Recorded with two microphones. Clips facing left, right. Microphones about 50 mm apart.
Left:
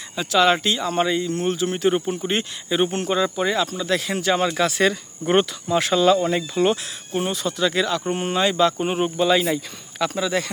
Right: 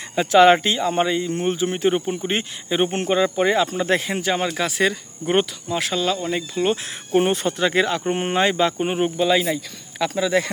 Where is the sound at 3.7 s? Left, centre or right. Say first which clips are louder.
Right 3 dB; right.